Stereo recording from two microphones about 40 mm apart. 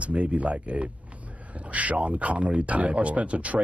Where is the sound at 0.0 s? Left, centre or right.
Right.